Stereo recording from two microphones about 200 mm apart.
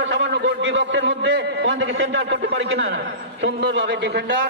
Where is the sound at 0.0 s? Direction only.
65° right (ahead or behind).